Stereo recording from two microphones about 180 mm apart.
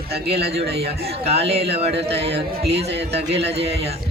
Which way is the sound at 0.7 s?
35° right (ahead or behind).